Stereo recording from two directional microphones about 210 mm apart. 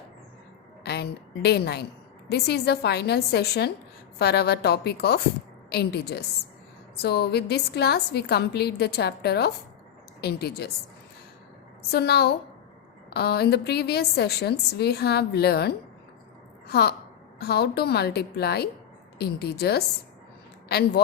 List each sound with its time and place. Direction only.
0.9 s a woman's voice: 50° left (ahead or behind)
11.9 s a woman's voice: 50° left (ahead or behind)